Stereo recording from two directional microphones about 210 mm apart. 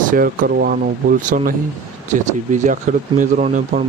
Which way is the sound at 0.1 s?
45° right (ahead or behind).